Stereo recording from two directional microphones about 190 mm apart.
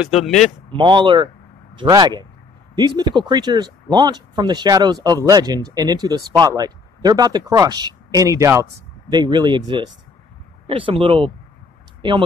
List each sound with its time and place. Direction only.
0.0 s speech: centre (ahead or behind)
0.7 s speech: 25° right (ahead or behind)